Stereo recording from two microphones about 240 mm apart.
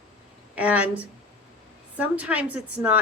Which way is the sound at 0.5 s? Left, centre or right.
Centre.